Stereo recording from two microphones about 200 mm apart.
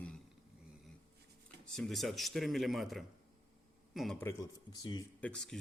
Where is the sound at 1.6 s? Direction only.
Centre (ahead or behind).